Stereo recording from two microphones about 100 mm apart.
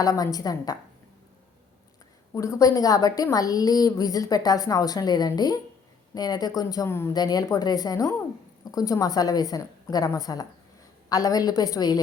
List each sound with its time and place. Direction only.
0.0 s a woman's voice: 40° left (ahead or behind)
2.3 s a woman's voice: 30° left (ahead or behind)
6.8 s a woman's voice: 25° left (ahead or behind)
7.1 s a woman's voice: 40° left (ahead or behind)